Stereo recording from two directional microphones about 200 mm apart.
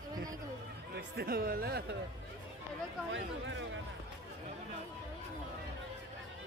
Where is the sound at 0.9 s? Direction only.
50° right (ahead or behind).